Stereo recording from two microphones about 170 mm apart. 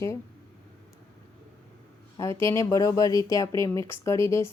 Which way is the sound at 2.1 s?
15° left (ahead or behind).